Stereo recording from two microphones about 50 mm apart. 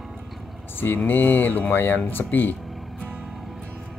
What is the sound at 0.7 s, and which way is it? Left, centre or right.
Speech, left.